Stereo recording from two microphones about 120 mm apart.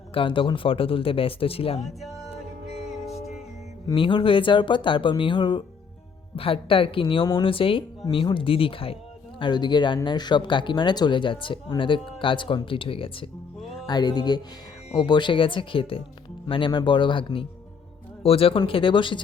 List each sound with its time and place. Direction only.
0.1 s speech: 45° left (ahead or behind)
2.0 s music: centre (ahead or behind)
3.9 s speech: 45° left (ahead or behind)
6.3 s speech: 50° left (ahead or behind)
9.4 s speech: 40° left (ahead or behind)
13.8 s speech: 35° left (ahead or behind)